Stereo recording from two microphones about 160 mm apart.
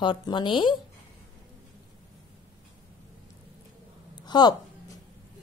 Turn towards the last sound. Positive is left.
turn(degrees=25)  # may be behind; listen again after turning